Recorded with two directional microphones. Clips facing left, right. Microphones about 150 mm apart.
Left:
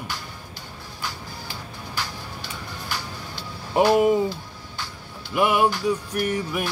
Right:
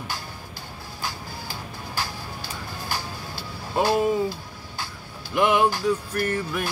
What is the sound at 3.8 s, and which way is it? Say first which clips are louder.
Speech: left 4 dB; 15° left (ahead or behind).